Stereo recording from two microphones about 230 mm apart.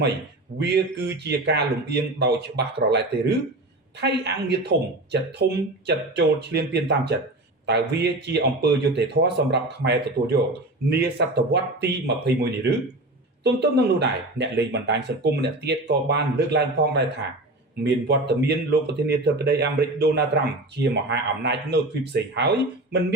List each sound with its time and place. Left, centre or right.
0.6 s speech: right